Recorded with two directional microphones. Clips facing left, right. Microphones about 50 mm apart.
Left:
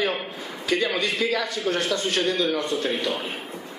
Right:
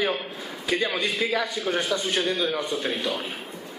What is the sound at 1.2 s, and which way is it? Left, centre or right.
Speech, centre.